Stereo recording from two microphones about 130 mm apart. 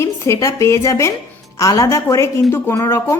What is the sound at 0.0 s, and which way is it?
A woman's voice, 20° left (ahead or behind).